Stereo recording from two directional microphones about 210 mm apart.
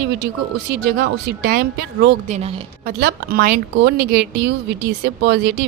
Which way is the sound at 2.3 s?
30° right (ahead or behind).